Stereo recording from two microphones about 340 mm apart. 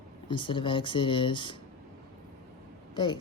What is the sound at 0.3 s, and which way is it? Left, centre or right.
Speech, centre.